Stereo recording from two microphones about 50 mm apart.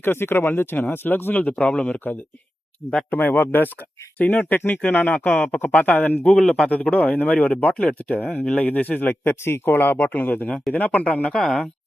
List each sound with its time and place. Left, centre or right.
0.0 s speech: left
3.1 s speech: left
4.2 s speech: left
6.4 s speech: centre
6.9 s speech: left
9.4 s speech: left
11.3 s speech: centre